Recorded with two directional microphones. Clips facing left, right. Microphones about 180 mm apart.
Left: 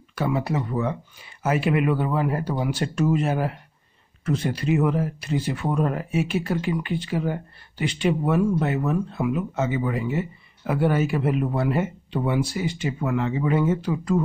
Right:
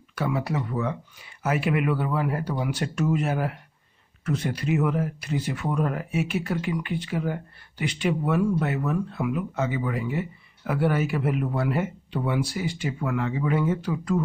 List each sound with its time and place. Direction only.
0.1 s speech: 25° left (ahead or behind)